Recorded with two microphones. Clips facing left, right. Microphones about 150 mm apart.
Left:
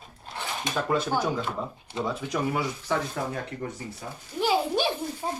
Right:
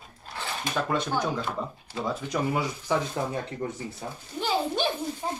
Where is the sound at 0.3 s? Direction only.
15° left (ahead or behind).